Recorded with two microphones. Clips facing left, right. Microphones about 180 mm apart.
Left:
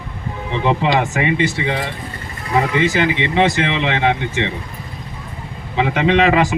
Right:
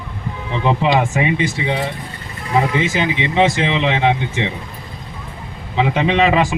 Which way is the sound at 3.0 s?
15° right (ahead or behind).